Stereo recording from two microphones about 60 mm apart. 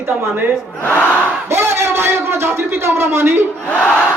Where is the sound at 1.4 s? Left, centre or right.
Right.